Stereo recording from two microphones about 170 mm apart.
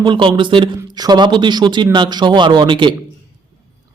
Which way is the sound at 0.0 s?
30° right (ahead or behind).